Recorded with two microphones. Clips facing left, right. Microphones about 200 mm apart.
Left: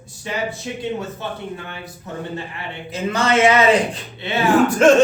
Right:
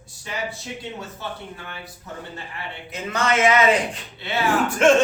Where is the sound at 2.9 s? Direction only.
30° left (ahead or behind).